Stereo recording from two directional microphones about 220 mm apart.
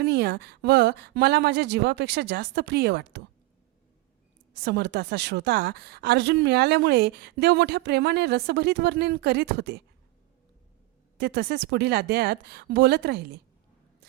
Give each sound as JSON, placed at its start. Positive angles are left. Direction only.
{"t": 0.0, "sound": "a woman's voice", "side_deg": -50}
{"t": 4.5, "sound": "a woman's voice", "side_deg": -50}
{"t": 11.2, "sound": "a woman's voice", "side_deg": -50}